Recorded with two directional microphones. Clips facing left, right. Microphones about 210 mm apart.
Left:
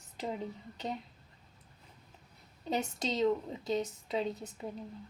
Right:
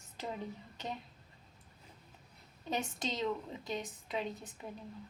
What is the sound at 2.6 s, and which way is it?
A woman's voice, 20° left (ahead or behind).